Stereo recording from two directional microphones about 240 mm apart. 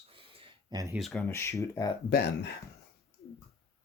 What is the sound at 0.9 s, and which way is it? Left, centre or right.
Speech, centre.